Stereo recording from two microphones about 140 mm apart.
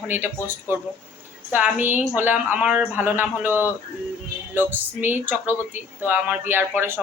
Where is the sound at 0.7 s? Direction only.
15° right (ahead or behind).